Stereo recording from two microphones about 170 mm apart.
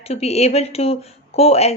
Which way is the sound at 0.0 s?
40° left (ahead or behind).